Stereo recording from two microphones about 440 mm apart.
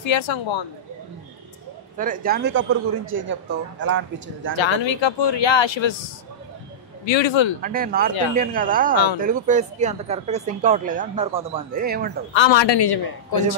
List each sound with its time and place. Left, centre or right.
0.0 s speech: left
2.0 s speech: centre
4.6 s speech: left
7.1 s speech: left
7.6 s speech: centre
12.4 s a man's voice: left